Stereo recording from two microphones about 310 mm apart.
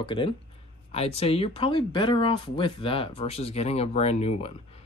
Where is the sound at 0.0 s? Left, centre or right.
Centre.